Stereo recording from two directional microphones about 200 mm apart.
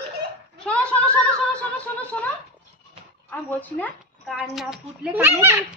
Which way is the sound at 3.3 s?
10° left (ahead or behind).